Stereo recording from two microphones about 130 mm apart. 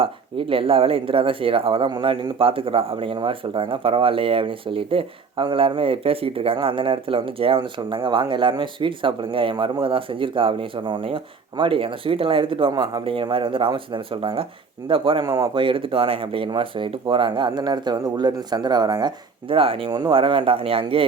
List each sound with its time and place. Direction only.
0.0 s speech: 45° right (ahead or behind)
19.9 s speech: 30° right (ahead or behind)
20.1 s speech: 45° right (ahead or behind)